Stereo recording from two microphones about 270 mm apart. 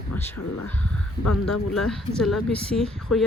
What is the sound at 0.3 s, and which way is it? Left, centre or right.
Speech, left.